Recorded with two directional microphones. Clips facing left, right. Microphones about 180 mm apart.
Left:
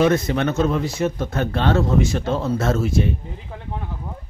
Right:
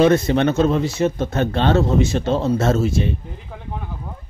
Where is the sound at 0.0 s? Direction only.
30° right (ahead or behind).